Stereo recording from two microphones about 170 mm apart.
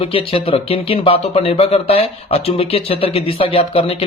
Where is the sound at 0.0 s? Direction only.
30° left (ahead or behind).